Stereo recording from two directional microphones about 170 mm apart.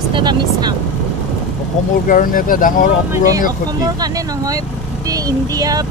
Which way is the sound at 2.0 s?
55° left (ahead or behind).